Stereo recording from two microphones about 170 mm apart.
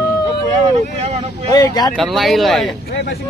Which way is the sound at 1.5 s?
25° left (ahead or behind).